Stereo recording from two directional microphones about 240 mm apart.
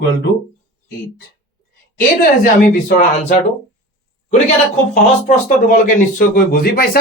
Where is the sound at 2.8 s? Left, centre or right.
Left.